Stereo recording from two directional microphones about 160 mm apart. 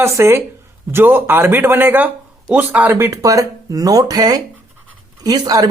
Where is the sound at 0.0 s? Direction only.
15° right (ahead or behind).